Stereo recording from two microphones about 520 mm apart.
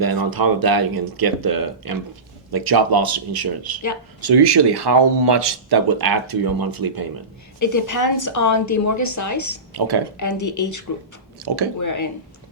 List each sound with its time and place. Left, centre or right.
0.0 s a sound: right
0.3 s speech: right
7.6 s a woman's voice: left
9.7 s speech: right
10.2 s a woman's voice: left